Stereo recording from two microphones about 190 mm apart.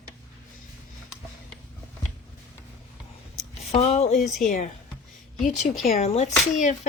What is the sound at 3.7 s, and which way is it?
Speech, 35° left (ahead or behind).